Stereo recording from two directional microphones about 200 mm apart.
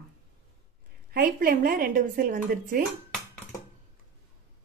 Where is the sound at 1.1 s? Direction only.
45° right (ahead or behind).